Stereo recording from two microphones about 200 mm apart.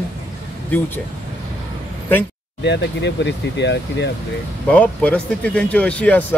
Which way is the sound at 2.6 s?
60° left (ahead or behind).